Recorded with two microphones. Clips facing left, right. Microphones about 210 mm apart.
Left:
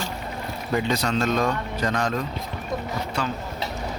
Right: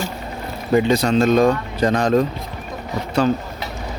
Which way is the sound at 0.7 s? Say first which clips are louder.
Right 8 dB; 25° right (ahead or behind).